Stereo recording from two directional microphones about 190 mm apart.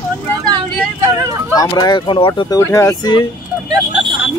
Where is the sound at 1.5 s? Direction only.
20° left (ahead or behind).